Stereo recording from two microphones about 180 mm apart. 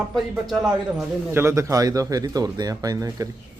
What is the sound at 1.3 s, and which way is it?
Speech, 15° right (ahead or behind).